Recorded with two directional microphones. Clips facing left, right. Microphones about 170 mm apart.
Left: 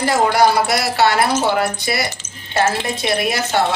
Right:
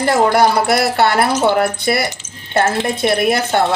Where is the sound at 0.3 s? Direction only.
55° right (ahead or behind).